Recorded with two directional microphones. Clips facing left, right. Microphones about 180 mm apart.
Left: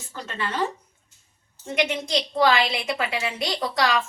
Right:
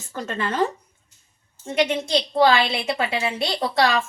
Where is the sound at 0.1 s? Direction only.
45° right (ahead or behind).